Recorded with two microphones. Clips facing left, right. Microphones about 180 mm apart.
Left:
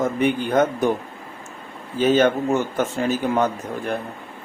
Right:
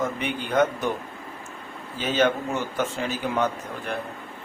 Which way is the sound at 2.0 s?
45° left (ahead or behind).